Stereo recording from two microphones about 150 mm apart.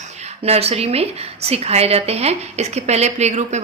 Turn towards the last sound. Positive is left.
turn(degrees=-50)  # may be behind; listen again after turning